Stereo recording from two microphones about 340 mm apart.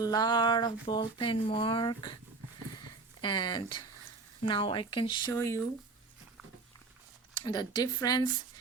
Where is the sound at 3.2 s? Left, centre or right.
Centre.